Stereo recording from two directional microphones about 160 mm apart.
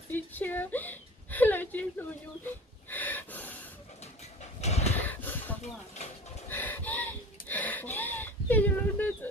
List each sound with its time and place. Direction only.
0.1 s a woman's voice: 10° left (ahead or behind)
2.9 s gasp: 10° left (ahead or behind)
4.0 s vehicle: 45° left (ahead or behind)
4.9 s a sound: 10° left (ahead or behind)